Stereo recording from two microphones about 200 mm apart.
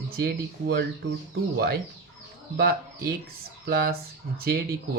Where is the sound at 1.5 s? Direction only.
50° right (ahead or behind).